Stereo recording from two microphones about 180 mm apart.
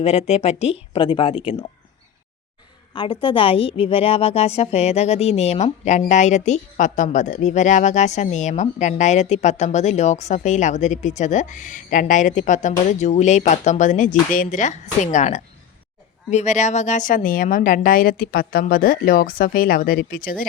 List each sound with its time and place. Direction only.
0.0 s a woman's voice: 35° left (ahead or behind)
2.9 s a woman's voice: 25° left (ahead or behind); by 20.5 s 50° left (ahead or behind)